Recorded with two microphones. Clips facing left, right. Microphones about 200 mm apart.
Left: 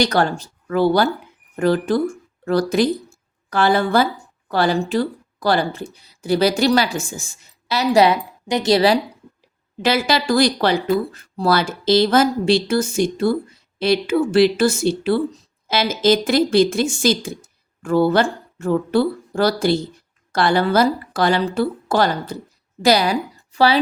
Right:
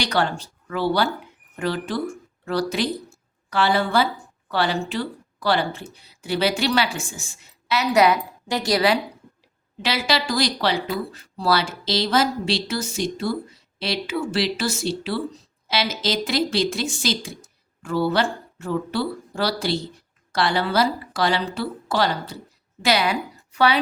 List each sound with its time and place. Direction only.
0.0 s a woman's voice: 45° left (ahead or behind)
9.8 s speech: 50° left (ahead or behind)
22.8 s a woman's voice: 40° left (ahead or behind)